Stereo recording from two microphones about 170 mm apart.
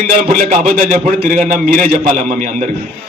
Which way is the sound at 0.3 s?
55° right (ahead or behind).